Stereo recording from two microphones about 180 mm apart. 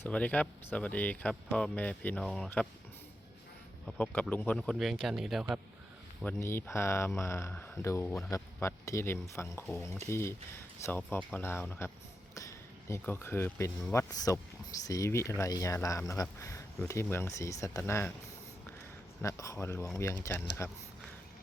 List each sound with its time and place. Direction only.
0.0 s speech: 5° left (ahead or behind)
3.8 s speech: 10° left (ahead or behind)
6.2 s speech: 15° left (ahead or behind)
19.2 s speech: 15° left (ahead or behind)